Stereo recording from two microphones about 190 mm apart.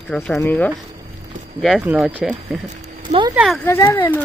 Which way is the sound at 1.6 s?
5° right (ahead or behind).